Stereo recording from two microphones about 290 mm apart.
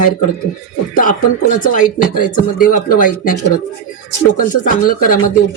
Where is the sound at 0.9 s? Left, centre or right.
Left.